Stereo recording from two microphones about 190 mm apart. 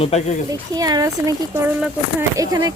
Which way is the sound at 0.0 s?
35° left (ahead or behind).